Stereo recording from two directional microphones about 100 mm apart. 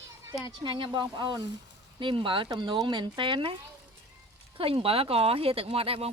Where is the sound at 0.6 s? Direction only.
55° right (ahead or behind).